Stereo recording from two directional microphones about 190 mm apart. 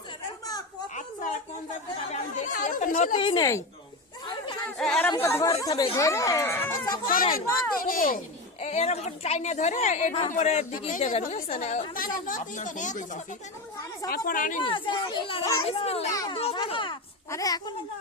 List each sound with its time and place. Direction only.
2.1 s chatter: 40° left (ahead or behind)
3.2 s a child's voice: 25° left (ahead or behind)
4.8 s speech: 5° left (ahead or behind)
7.3 s speech: 50° left (ahead or behind)
8.6 s a woman's voice: 35° left (ahead or behind)
14.3 s speech: 45° left (ahead or behind)
14.6 s a child's voice: 25° left (ahead or behind)
16.1 s a child's voice: 20° left (ahead or behind)
16.4 s a child's voice: 30° left (ahead or behind)